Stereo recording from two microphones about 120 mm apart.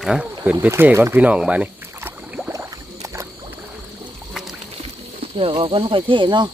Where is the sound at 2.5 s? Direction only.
25° right (ahead or behind).